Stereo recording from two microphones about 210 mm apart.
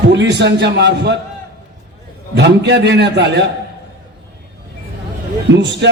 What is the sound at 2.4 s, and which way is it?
A man's voice, 55° right (ahead or behind).